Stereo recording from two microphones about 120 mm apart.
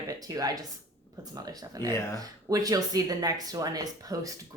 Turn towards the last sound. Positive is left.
turn(degrees=-30)  # may be behind; listen again after turning